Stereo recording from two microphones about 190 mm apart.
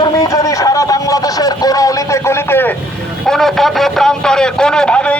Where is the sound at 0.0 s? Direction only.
20° left (ahead or behind).